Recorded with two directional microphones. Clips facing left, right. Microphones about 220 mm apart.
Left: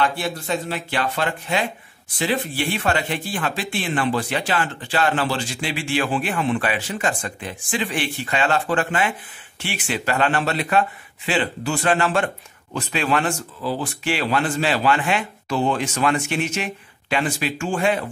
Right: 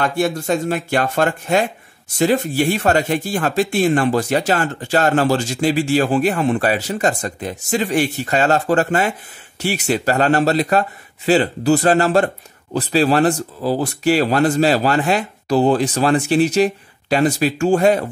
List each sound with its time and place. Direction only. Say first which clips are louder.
0.0 s speech: right 5 dB; 45° right (ahead or behind)